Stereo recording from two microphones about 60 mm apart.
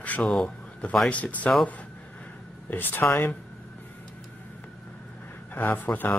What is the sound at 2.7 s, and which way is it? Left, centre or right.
Speech, left.